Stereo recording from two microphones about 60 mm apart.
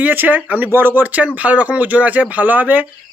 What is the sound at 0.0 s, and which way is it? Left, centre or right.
Speech, right.